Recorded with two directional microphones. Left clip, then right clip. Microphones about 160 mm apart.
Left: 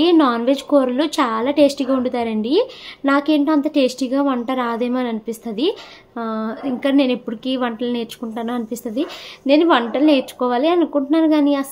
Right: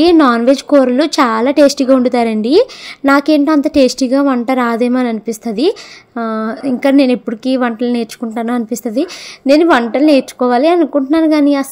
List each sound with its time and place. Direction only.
0.0 s a woman's voice: 45° right (ahead or behind)